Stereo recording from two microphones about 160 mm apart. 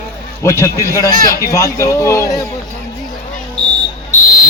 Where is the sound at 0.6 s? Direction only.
20° left (ahead or behind).